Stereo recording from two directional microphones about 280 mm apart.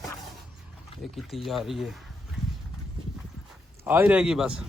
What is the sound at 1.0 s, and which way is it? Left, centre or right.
Speech, centre.